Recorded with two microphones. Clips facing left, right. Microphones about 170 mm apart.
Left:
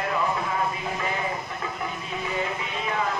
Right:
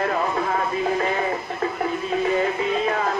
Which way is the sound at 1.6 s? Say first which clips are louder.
Right 8 dB; 50° right (ahead or behind).